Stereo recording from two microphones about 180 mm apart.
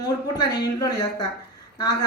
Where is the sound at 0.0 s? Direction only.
20° left (ahead or behind).